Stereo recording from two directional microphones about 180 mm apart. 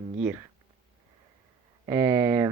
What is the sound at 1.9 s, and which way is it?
Speech, 15° right (ahead or behind).